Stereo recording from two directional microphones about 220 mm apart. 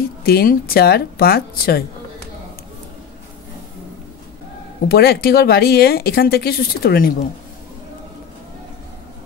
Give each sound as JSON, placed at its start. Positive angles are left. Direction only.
{"t": 0.2, "sound": "speech", "side_deg": 45}
{"t": 4.8, "sound": "speech", "side_deg": 45}